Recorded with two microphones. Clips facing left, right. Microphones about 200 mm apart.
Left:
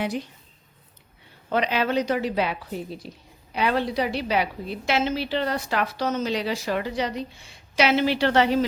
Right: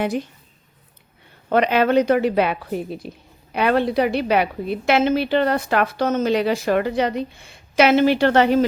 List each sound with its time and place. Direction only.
0.0 s speech: 50° right (ahead or behind)
1.5 s a woman's voice: 55° right (ahead or behind)